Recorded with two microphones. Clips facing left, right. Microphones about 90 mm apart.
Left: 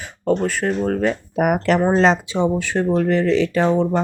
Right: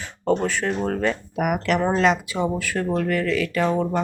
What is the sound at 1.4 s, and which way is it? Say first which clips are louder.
Speech: left 5 dB; 35° left (ahead or behind).